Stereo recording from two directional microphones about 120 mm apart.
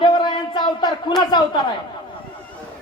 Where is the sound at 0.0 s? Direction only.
40° left (ahead or behind).